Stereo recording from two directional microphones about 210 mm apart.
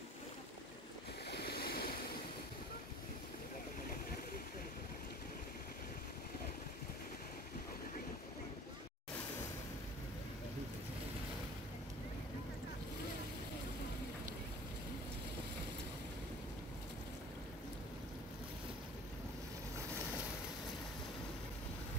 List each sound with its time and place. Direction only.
1.3 s waves: 50° left (ahead or behind)